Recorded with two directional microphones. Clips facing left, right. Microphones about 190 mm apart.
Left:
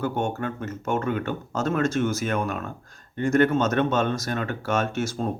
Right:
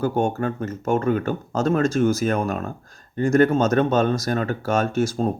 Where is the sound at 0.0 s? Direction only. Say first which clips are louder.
Right 5 dB; 35° right (ahead or behind).